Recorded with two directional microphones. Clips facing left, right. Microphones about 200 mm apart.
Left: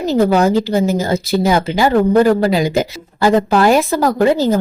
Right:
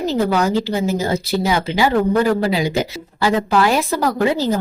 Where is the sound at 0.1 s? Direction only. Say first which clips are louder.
Left 6 dB; 45° left (ahead or behind).